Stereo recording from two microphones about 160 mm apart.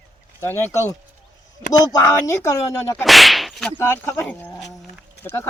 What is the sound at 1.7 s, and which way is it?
Speech, 25° left (ahead or behind).